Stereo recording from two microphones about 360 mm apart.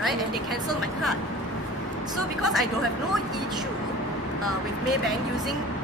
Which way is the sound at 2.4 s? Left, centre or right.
Centre.